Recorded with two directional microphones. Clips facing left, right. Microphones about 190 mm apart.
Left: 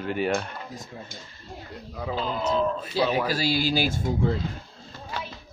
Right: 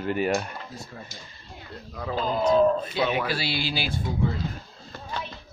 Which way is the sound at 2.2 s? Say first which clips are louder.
Right 6 dB; 45° right (ahead or behind).